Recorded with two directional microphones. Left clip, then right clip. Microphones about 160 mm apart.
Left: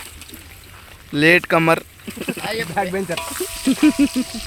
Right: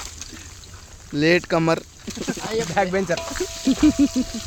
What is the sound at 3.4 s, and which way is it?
Sizzle, 45° right (ahead or behind).